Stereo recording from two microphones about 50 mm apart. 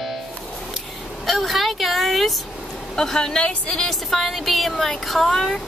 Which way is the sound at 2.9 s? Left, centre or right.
Centre.